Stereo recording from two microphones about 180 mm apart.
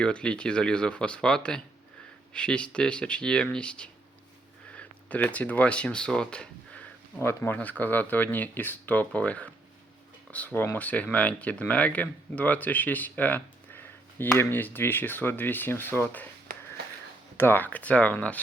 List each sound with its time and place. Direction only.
0.0 s speech: 5° left (ahead or behind)
16.5 s wheeze: 50° right (ahead or behind)
17.3 s speech: 10° left (ahead or behind)